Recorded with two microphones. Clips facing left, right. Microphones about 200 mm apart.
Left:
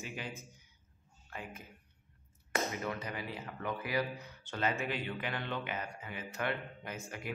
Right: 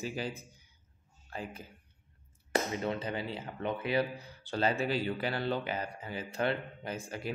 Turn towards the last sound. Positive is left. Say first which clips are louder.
# right 5 dB
turn(degrees=-30)  # may be behind; listen again after turning